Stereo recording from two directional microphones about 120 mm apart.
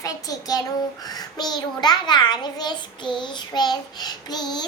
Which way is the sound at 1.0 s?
35° left (ahead or behind).